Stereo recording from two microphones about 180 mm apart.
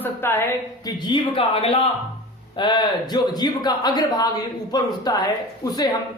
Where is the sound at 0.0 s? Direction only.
15° left (ahead or behind).